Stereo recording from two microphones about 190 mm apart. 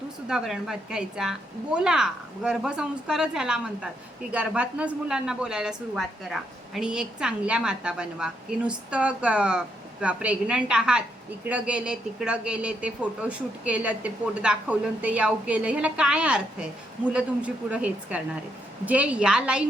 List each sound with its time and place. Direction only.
0.3 s a woman's voice: 5° right (ahead or behind)